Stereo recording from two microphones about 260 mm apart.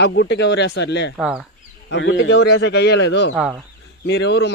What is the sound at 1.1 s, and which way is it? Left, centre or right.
Speech, centre.